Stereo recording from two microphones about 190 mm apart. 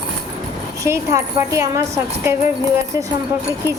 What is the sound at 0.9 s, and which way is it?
Speech, 15° right (ahead or behind).